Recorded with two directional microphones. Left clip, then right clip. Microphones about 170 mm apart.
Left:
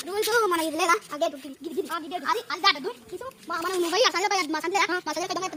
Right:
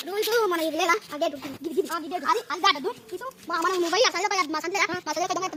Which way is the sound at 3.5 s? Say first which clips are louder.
Right 3 dB; 55° right (ahead or behind).